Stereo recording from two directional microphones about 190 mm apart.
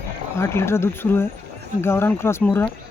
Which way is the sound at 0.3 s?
15° left (ahead or behind).